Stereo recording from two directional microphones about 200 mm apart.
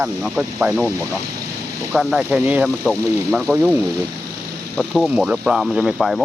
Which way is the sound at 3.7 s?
15° right (ahead or behind).